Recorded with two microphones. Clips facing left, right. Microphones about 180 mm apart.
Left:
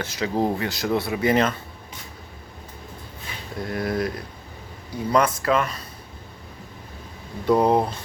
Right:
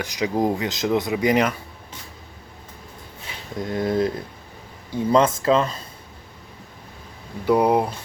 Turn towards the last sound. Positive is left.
turn(degrees=-10)  # may be behind; listen again after turning